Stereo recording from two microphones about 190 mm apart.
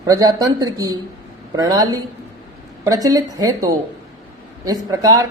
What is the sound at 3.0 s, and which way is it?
Speech, 20° right (ahead or behind).